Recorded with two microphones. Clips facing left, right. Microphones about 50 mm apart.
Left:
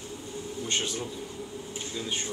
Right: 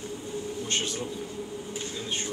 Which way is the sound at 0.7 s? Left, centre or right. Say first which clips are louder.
Left 1 dB; centre.